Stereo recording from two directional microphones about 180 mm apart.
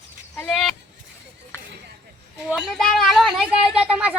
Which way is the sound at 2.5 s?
Centre (ahead or behind).